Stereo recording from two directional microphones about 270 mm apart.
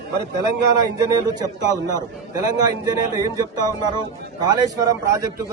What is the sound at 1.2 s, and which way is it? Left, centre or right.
A man's voice, centre.